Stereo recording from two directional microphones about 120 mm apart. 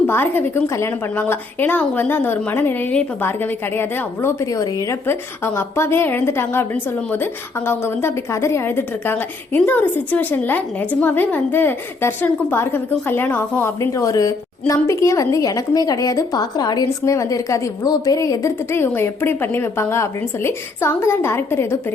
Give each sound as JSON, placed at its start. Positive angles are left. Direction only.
{"t": 0.1, "sound": "a woman's voice", "side_deg": 15}